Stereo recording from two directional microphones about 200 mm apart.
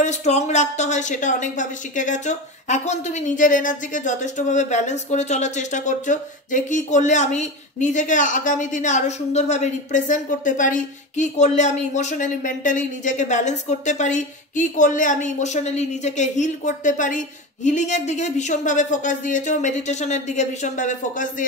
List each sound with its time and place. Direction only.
0.0 s a woman's voice: 35° left (ahead or behind)